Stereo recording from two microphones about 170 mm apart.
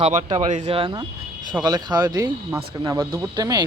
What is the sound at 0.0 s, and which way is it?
Speech, 45° right (ahead or behind).